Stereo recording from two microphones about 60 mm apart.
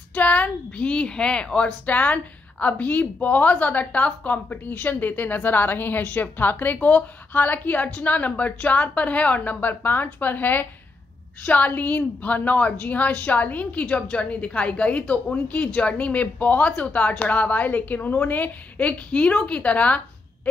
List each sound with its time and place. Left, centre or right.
0.1 s a woman's voice: left